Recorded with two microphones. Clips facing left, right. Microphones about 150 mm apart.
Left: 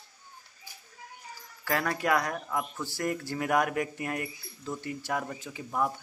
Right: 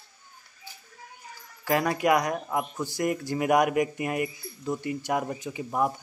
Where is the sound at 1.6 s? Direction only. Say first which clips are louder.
Right 5 dB; 15° right (ahead or behind).